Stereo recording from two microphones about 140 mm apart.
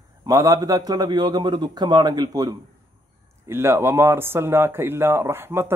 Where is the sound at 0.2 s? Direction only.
25° right (ahead or behind).